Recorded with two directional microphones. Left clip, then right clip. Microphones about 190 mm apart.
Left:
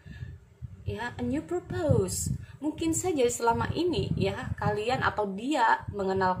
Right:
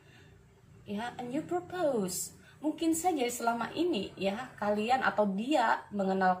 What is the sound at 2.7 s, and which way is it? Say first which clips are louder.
A woman's voice: left 2 dB; 45° left (ahead or behind).